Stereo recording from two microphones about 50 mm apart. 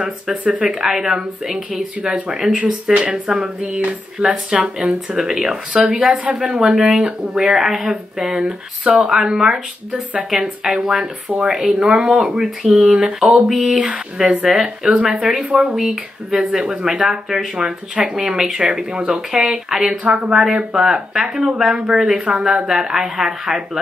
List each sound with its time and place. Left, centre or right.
0.0 s speech: right
0.7 s speech: centre
2.5 s speech: right
12.0 s speech: centre
20.0 s speech: right
20.3 s speech: centre